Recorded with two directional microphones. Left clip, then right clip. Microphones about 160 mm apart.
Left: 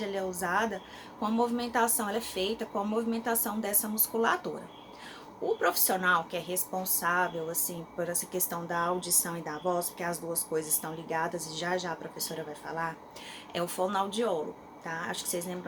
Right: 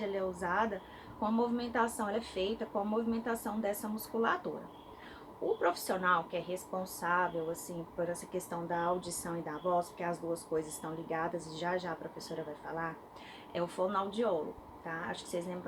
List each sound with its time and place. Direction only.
0.0 s a woman's voice: 20° left (ahead or behind)
5.5 s a woman's voice: 25° left (ahead or behind)